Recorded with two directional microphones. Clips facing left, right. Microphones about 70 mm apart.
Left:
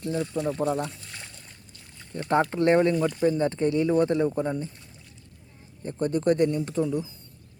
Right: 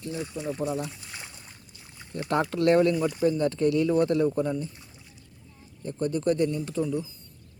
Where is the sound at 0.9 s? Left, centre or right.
Centre.